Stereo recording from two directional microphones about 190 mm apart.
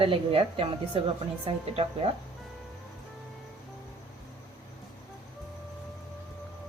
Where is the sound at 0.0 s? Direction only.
30° right (ahead or behind).